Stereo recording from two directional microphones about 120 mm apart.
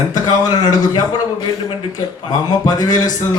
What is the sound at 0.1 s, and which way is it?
Speech, 35° left (ahead or behind).